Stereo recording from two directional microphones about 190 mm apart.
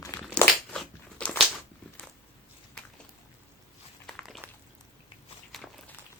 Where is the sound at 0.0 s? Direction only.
15° left (ahead or behind).